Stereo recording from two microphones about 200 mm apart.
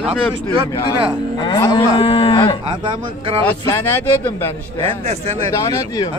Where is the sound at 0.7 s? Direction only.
15° left (ahead or behind).